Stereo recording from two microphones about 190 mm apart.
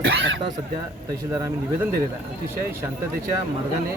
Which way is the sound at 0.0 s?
70° right (ahead or behind).